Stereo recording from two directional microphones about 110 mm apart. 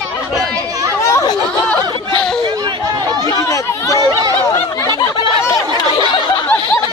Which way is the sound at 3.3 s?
30° left (ahead or behind).